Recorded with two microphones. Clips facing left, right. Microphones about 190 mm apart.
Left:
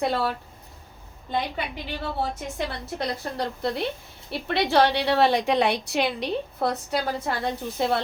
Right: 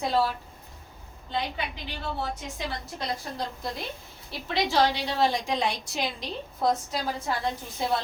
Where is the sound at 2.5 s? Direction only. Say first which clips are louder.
Left 5 dB; 60° left (ahead or behind).